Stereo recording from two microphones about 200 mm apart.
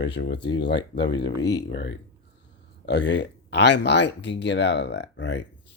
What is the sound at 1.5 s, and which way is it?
Speech, 60° left (ahead or behind).